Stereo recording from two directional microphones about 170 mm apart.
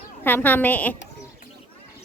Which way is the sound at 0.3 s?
10° left (ahead or behind).